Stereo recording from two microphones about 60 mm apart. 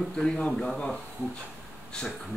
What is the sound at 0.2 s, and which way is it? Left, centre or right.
Speech, centre.